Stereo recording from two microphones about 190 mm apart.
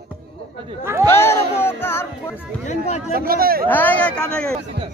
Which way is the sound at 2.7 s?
35° left (ahead or behind).